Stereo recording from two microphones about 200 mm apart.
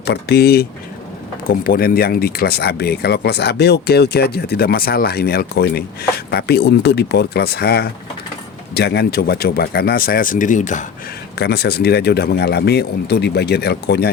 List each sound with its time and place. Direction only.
0.0 s speech: 55° left (ahead or behind); by 10.8 s 40° left (ahead or behind)
11.3 s speech: 55° left (ahead or behind)